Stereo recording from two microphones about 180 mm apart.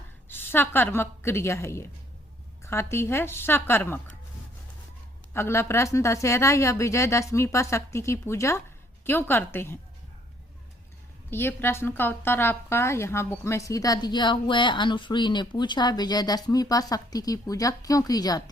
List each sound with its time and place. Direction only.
0.3 s a woman's voice: 10° left (ahead or behind)
5.3 s a woman's voice: 15° left (ahead or behind)
11.3 s a woman's voice: 10° left (ahead or behind)